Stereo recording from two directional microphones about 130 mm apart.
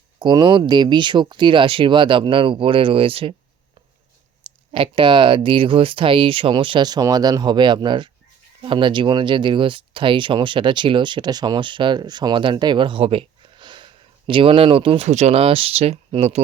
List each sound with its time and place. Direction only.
0.2 s speech: 35° right (ahead or behind)
4.4 s speech: 40° right (ahead or behind)